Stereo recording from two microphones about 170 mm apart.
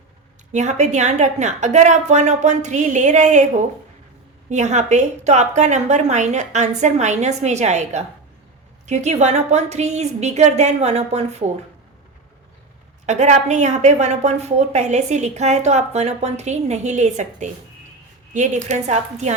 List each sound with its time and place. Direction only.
0.5 s a woman's voice: 45° right (ahead or behind)
13.1 s a woman's voice: 45° right (ahead or behind)